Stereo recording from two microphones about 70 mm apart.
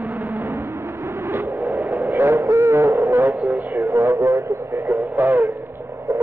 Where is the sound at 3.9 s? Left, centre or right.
Right.